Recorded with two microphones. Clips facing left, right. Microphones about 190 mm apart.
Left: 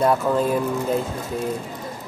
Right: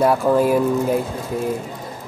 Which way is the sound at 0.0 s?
5° right (ahead or behind).